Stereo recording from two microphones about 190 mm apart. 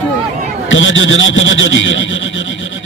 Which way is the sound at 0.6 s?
90° left.